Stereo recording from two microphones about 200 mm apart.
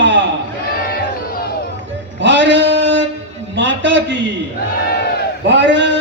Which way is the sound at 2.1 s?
65° right (ahead or behind).